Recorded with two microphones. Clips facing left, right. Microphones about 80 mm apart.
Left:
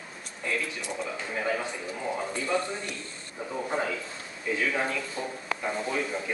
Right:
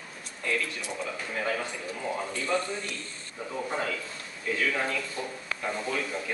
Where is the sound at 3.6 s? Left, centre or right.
Centre.